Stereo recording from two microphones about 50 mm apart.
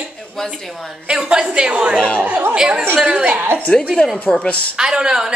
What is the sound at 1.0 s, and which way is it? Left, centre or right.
Speech, centre.